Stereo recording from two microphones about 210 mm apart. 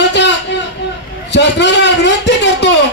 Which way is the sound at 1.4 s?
55° left (ahead or behind).